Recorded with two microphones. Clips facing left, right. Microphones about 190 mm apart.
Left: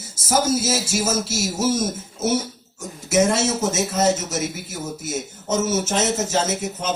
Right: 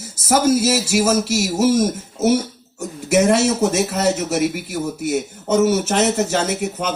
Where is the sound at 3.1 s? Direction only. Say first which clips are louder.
Right 4 dB; 60° right (ahead or behind).